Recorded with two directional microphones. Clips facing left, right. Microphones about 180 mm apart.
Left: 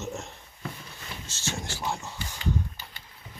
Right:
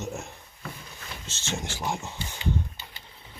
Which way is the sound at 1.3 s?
20° right (ahead or behind).